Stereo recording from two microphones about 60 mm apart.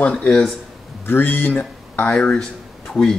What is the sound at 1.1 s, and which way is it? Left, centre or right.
Speech, left.